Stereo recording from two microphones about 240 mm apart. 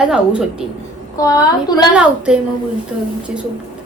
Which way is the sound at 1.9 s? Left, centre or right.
Centre.